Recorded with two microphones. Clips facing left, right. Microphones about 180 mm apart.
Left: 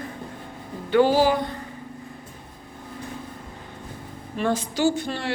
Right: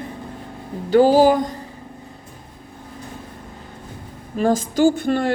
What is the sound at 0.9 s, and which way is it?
Music, 40° right (ahead or behind).